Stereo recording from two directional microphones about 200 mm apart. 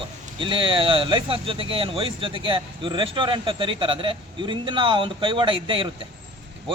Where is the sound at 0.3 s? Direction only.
25° right (ahead or behind).